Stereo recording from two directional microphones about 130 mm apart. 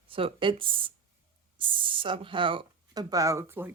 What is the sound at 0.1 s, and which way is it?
Speech, 45° right (ahead or behind).